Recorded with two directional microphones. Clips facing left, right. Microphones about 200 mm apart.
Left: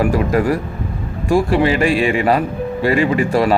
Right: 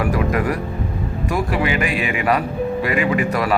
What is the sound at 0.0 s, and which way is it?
Speech, 30° left (ahead or behind).